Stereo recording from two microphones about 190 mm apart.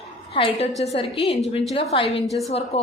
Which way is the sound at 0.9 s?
30° left (ahead or behind).